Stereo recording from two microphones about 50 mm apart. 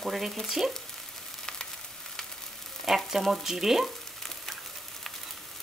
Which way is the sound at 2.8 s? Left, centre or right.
Centre.